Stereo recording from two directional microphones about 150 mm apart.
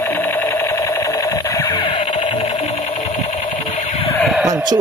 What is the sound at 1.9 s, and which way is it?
Sewing machine, 40° left (ahead or behind).